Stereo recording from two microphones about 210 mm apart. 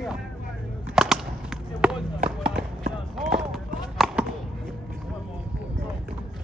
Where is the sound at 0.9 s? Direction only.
5° right (ahead or behind).